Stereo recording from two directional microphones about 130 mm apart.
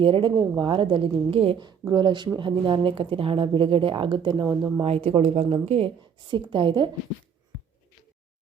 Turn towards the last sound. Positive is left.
turn(degrees=-40)  # may be behind; listen again after turning